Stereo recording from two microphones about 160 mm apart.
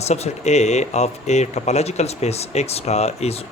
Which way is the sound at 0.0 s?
45° left (ahead or behind).